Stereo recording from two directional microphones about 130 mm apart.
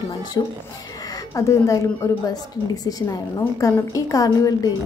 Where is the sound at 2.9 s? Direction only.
30° left (ahead or behind).